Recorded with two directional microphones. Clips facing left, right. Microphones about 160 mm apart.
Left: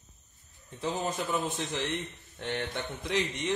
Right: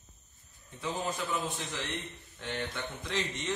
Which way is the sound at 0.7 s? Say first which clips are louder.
Left 3 dB; 40° left (ahead or behind).